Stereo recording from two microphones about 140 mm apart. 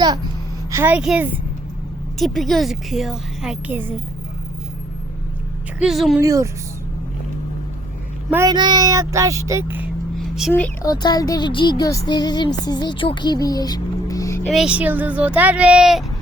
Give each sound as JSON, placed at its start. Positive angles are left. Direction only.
{"t": 0.7, "sound": "a woman's voice", "side_deg": -15}
{"t": 3.7, "sound": "speech", "side_deg": -15}
{"t": 5.8, "sound": "a woman's voice", "side_deg": 0}
{"t": 6.1, "sound": "speech", "side_deg": -25}
{"t": 8.4, "sound": "speech", "side_deg": -30}
{"t": 10.2, "sound": "a sound", "side_deg": -5}
{"t": 10.8, "sound": "speech", "side_deg": 30}
{"t": 14.4, "sound": "speech", "side_deg": 0}